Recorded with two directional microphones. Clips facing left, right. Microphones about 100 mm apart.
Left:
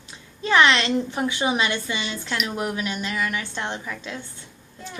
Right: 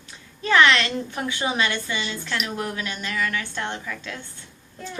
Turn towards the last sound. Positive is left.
turn(degrees=20)  # may be behind; listen again after turning